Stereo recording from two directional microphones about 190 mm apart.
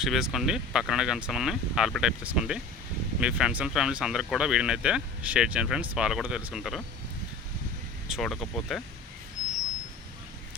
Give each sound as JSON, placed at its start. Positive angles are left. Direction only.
{"t": 0.0, "sound": "speech", "side_deg": 0}
{"t": 8.0, "sound": "speech", "side_deg": 0}